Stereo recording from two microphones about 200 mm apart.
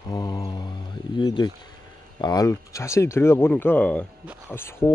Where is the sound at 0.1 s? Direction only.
20° left (ahead or behind).